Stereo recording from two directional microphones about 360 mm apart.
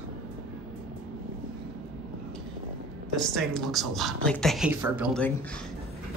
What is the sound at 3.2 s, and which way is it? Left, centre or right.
Speech, centre.